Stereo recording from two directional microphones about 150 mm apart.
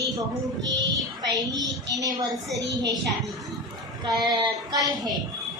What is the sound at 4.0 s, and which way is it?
A woman's voice, 25° right (ahead or behind).